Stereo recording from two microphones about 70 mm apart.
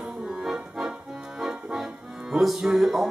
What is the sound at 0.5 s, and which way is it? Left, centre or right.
Accordion, centre.